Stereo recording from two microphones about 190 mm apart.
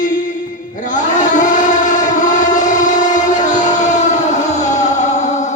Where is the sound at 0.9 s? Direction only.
40° left (ahead or behind).